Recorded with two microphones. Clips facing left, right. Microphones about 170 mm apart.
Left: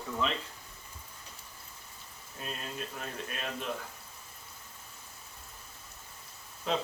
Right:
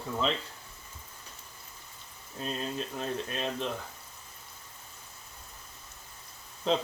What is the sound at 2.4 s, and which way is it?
Speech, 30° right (ahead or behind).